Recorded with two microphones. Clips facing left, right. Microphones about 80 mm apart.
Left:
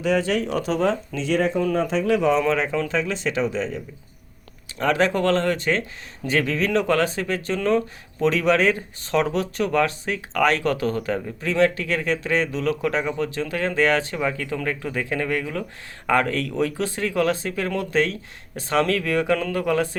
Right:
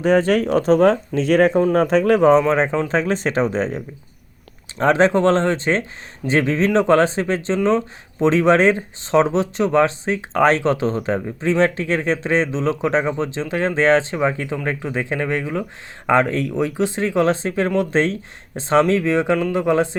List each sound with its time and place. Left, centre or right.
0.0 s speech: right
4.8 s speech: right